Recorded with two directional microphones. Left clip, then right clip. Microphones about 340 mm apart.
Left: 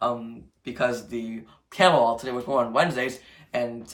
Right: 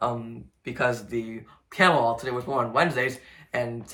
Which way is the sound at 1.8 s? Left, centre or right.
Centre.